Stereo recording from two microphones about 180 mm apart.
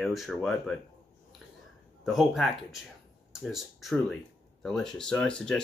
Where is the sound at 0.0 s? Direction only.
Centre (ahead or behind).